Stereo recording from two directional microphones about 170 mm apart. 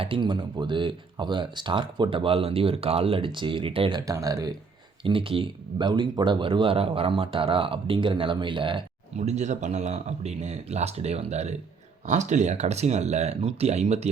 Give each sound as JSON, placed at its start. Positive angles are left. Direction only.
{"t": 0.0, "sound": "speech", "side_deg": -30}
{"t": 5.0, "sound": "speech", "side_deg": -30}
{"t": 9.1, "sound": "speech", "side_deg": -40}